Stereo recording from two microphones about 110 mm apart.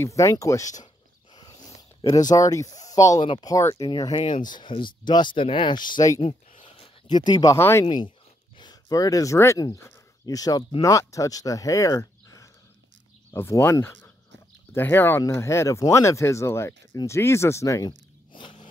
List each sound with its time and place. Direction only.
0.0 s speech: 30° left (ahead or behind)
2.0 s speech: 35° left (ahead or behind)
2.9 s a sound: 30° left (ahead or behind)
3.2 s speech: 45° left (ahead or behind)
3.5 s speech: 30° left (ahead or behind)
6.2 s a sound: 60° left (ahead or behind)
7.1 s speech: 40° left (ahead or behind)
7.5 s speech: 20° left (ahead or behind)
7.8 s speech: 40° left (ahead or behind)
18.3 s a sound: 50° left (ahead or behind)